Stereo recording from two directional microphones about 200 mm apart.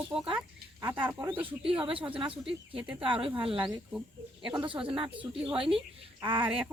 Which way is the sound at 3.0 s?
25° right (ahead or behind).